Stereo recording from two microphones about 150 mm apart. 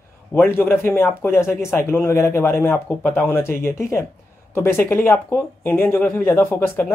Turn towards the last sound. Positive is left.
turn(degrees=15)  # may be behind; listen again after turning